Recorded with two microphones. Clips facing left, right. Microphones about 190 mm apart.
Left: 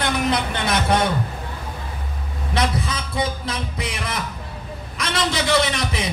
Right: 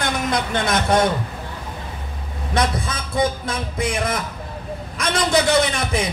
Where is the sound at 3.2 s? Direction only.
50° right (ahead or behind).